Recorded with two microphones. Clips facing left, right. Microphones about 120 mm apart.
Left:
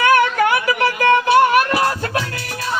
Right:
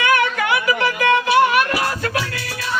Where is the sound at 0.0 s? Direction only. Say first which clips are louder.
Left 4 dB; 40° left (ahead or behind).